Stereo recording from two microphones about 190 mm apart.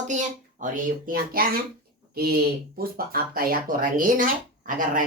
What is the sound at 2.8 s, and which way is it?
Speech, 50° right (ahead or behind).